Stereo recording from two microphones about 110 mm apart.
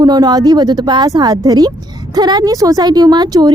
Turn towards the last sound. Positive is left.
turn(degrees=-40)  # may be behind; listen again after turning